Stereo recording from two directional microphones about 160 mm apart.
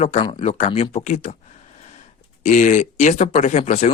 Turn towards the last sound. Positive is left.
turn(degrees=45)  # may be behind; listen again after turning